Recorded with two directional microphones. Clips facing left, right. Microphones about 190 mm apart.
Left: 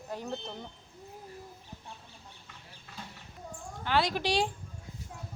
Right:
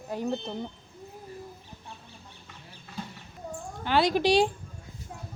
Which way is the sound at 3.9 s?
15° right (ahead or behind).